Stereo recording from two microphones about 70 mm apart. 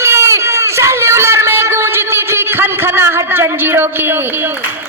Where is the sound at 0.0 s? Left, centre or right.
Right.